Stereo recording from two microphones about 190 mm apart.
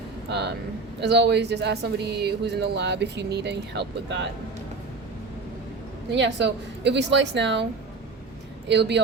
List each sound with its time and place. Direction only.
0.3 s speech: 60° right (ahead or behind)
6.1 s a woman's voice: 65° right (ahead or behind)